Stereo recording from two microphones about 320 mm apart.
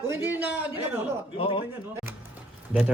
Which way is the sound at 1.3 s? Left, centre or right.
Centre.